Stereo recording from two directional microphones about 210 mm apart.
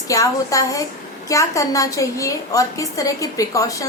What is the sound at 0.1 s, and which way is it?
A woman's voice, 15° left (ahead or behind).